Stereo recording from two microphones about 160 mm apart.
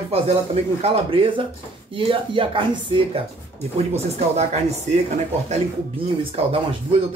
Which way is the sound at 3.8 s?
40° right (ahead or behind).